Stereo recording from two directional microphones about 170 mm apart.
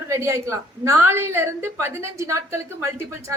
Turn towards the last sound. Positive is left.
turn(degrees=-15)  # may be behind; listen again after turning